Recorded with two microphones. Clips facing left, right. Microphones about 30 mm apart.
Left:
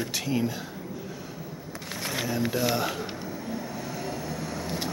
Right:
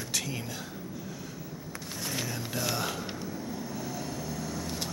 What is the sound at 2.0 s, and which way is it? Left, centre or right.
Vehicle, left.